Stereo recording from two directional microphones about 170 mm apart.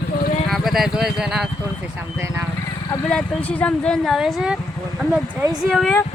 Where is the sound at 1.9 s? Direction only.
15° right (ahead or behind).